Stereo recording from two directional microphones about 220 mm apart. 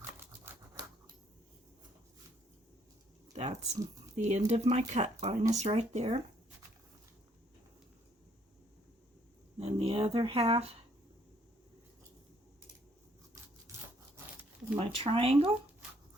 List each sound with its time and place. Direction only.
0.0 s typewriter: 10° right (ahead or behind)
3.3 s speech: 30° right (ahead or behind)
9.6 s a sound: 25° right (ahead or behind)
13.7 s wood: 15° right (ahead or behind)
14.8 s speech: 25° right (ahead or behind)